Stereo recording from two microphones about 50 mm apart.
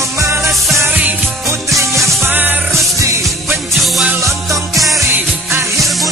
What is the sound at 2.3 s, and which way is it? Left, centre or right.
Music, right.